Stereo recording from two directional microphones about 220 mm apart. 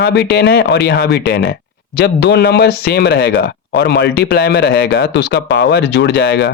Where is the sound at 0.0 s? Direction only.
50° left (ahead or behind).